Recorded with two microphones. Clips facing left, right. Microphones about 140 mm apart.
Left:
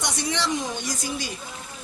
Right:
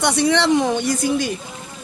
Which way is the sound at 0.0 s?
65° right (ahead or behind).